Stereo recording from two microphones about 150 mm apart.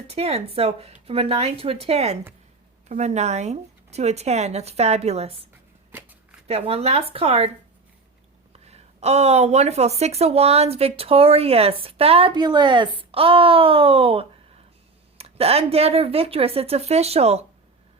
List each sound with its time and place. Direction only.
0.1 s speech: 45° right (ahead or behind)
5.9 s shuffling cards: 10° right (ahead or behind)
6.5 s speech: 45° right (ahead or behind)
8.5 s speech: 45° right (ahead or behind)